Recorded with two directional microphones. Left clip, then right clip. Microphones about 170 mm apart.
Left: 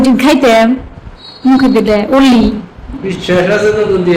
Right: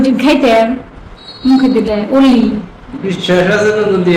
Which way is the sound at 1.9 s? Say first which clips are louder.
Left 3 dB; 30° left (ahead or behind).